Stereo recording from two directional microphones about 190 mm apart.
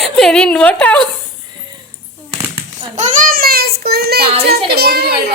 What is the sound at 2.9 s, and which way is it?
A child's voice, 40° right (ahead or behind).